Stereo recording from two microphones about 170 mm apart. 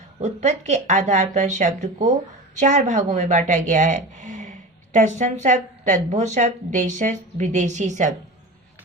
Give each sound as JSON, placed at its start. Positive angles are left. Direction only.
{"t": 0.2, "sound": "a woman's voice", "side_deg": -40}